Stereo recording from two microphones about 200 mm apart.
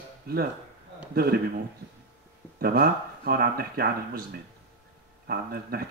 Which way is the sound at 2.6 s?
50° right (ahead or behind).